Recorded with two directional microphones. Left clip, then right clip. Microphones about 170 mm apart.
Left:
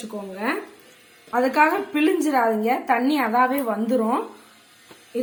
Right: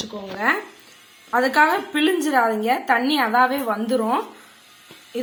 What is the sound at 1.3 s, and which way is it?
A woman's voice, 15° left (ahead or behind).